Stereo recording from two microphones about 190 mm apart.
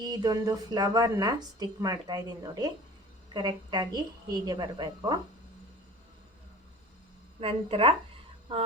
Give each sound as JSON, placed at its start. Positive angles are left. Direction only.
{"t": 0.0, "sound": "a woman's voice", "side_deg": -20}
{"t": 7.3, "sound": "a woman's voice", "side_deg": -30}